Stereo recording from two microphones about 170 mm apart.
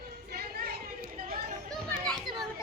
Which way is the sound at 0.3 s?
65° right (ahead or behind).